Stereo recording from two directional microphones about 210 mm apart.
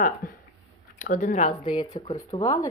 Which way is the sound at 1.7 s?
20° left (ahead or behind).